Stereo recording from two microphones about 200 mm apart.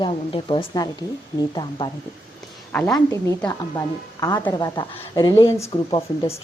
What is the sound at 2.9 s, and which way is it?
A woman's voice, 15° left (ahead or behind).